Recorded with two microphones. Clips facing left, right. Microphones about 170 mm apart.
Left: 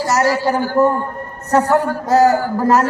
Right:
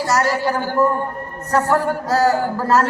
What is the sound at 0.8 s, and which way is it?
A man's voice, 20° left (ahead or behind).